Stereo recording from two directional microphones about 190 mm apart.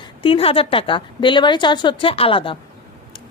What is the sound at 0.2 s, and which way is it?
A woman's voice, 30° left (ahead or behind).